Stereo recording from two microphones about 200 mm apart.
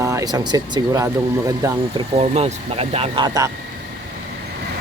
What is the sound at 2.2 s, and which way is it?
Speech, 35° right (ahead or behind).